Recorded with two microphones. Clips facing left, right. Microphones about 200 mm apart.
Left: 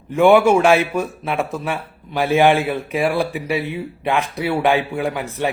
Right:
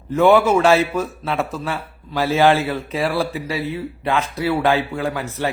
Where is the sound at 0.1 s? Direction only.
10° left (ahead or behind).